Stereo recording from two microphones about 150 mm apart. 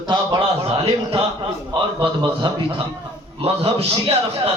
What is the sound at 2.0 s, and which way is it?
A man's voice, 30° right (ahead or behind).